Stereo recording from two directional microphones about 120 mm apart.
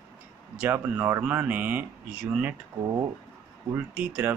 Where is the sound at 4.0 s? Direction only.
15° right (ahead or behind).